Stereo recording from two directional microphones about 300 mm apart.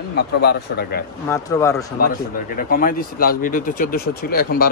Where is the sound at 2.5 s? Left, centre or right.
Left.